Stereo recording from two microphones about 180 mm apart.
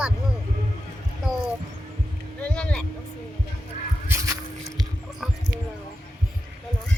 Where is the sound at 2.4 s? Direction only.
5° left (ahead or behind).